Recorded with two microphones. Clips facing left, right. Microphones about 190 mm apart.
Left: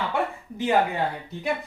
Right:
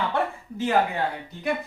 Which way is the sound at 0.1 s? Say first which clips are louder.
Even; 15° left (ahead or behind).